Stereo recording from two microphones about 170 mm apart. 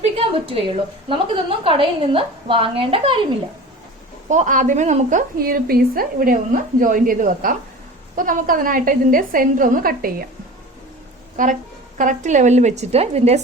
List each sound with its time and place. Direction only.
0.0 s a sound: 35° right (ahead or behind)
1.0 s a woman's voice: 30° right (ahead or behind)
4.3 s a woman's voice: 45° right (ahead or behind)
11.4 s a woman's voice: 50° right (ahead or behind)